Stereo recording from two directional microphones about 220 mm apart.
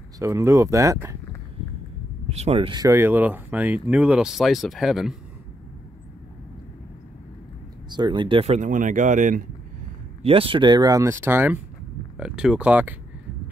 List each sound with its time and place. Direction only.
0.2 s speech: 10° right (ahead or behind)
2.2 s speech: 30° right (ahead or behind); by 5.1 s centre (ahead or behind)
7.9 s speech: 20° right (ahead or behind); by 9.4 s 35° right (ahead or behind)
10.2 s speech: 25° right (ahead or behind); by 12.9 s 5° right (ahead or behind)